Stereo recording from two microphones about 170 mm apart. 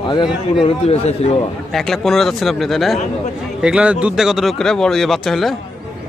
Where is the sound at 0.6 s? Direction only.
40° left (ahead or behind).